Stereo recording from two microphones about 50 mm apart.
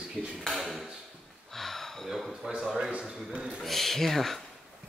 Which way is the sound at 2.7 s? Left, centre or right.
Centre.